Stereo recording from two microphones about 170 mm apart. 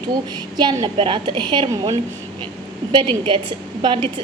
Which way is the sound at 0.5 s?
25° right (ahead or behind).